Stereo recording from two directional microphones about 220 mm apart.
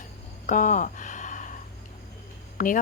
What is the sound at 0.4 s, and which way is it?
Speech, 35° left (ahead or behind).